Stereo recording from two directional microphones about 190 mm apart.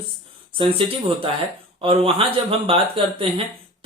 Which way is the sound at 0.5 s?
30° right (ahead or behind).